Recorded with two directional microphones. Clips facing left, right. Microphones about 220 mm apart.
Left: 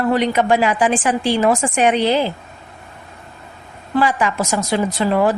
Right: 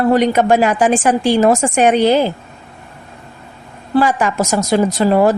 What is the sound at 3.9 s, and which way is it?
Speech, 45° right (ahead or behind).